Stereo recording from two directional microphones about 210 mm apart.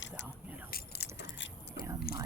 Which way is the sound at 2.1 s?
45° left (ahead or behind).